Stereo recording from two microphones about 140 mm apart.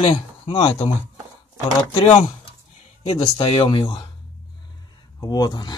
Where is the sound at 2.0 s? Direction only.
50° left (ahead or behind).